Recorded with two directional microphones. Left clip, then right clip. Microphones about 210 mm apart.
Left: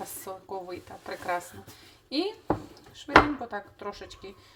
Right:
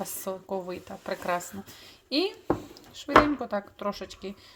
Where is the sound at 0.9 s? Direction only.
40° right (ahead or behind).